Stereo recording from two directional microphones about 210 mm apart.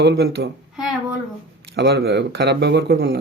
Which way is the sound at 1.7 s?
50° right (ahead or behind).